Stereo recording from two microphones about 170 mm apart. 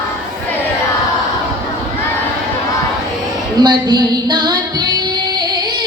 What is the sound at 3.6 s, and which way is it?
Music, 25° right (ahead or behind).